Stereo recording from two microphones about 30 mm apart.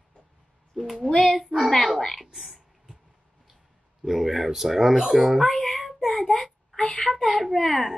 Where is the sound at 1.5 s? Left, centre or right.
Centre.